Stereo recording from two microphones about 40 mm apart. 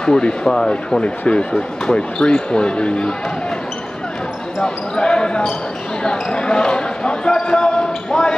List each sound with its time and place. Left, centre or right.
0.0 s speech: centre
4.6 s speech: left